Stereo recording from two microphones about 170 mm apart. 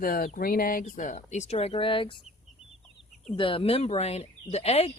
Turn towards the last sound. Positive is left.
turn(degrees=35)  # may be behind; listen again after turning